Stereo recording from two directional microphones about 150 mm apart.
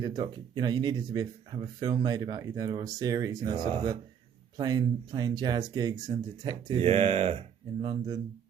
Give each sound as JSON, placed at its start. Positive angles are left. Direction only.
{"t": 0.0, "sound": "speech", "side_deg": -30}